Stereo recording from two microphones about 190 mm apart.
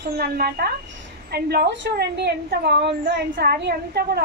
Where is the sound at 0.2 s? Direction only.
55° right (ahead or behind).